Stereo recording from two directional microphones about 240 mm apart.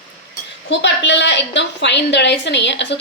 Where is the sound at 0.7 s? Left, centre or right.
Left.